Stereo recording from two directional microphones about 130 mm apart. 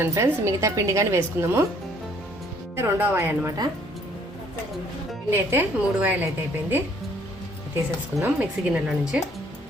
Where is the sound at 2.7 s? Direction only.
20° right (ahead or behind).